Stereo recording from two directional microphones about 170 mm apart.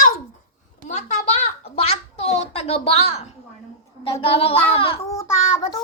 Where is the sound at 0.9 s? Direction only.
45° left (ahead or behind).